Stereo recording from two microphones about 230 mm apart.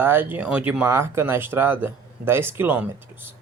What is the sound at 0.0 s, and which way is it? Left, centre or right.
Speech, centre.